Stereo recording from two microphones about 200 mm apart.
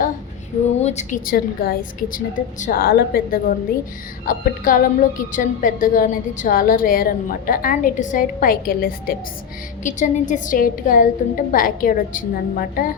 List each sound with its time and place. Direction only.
0.8 s a woman's voice: 35° left (ahead or behind)